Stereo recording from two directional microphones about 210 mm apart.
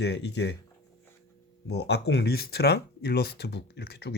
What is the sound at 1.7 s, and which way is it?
Speech, 50° left (ahead or behind).